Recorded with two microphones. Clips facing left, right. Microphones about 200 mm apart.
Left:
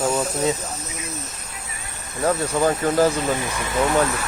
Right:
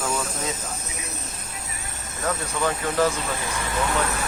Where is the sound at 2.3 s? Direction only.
35° left (ahead or behind).